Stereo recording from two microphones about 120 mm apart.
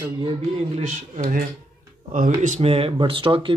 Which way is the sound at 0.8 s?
90° right.